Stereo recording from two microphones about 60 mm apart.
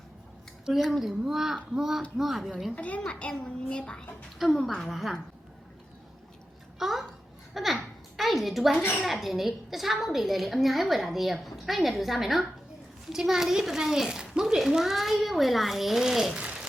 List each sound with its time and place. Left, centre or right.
0.8 s a woman's voice: centre
2.7 s a woman's voice: left
4.4 s a woman's voice: centre
6.7 s babbling: centre
7.5 s a sound: centre
9.0 s a woman's voice: centre
16.3 s a sound: right